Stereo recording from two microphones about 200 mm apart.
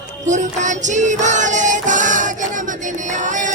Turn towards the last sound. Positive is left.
turn(degrees=-40)  # may be behind; listen again after turning